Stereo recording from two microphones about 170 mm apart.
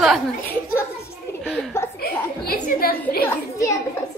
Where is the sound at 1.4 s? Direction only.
5° right (ahead or behind).